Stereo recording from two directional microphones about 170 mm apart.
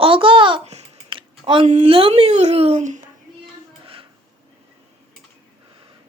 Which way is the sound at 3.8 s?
30° right (ahead or behind).